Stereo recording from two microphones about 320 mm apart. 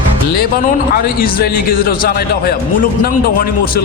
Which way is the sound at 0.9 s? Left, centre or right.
Left.